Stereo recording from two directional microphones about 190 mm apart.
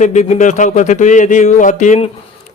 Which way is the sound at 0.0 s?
40° left (ahead or behind).